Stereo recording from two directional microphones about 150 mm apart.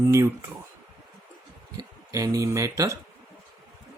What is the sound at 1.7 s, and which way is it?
Speech, 25° right (ahead or behind).